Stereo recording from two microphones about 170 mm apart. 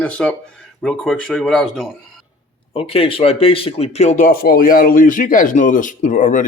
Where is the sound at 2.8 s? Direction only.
35° left (ahead or behind).